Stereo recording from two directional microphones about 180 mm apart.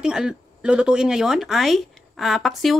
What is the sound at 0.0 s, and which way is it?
Speech, 5° right (ahead or behind).